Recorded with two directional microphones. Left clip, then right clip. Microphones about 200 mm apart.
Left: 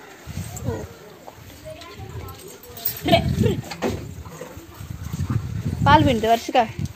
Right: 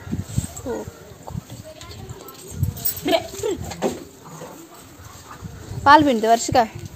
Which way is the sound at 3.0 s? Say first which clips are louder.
Left 2 dB; 45° right (ahead or behind).